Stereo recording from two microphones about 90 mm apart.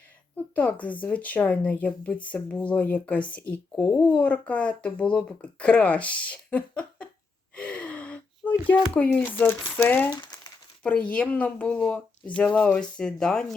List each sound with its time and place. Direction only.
0.3 s speech: 15° left (ahead or behind)
7.5 s gasp: 15° left (ahead or behind)
8.9 s speech: 15° left (ahead or behind)
10.1 s crumpling: 50° left (ahead or behind)
10.8 s speech: 15° left (ahead or behind)